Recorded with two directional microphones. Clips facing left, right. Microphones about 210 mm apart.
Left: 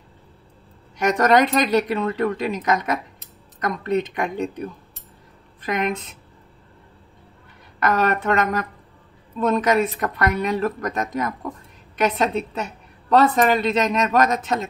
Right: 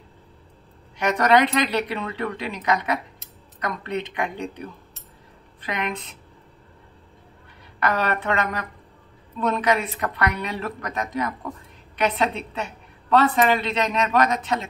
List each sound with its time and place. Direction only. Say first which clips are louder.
0.9 s a woman's voice: left 2 dB; 45° left (ahead or behind)
7.8 s a woman's voice: left 3 dB; 45° left (ahead or behind)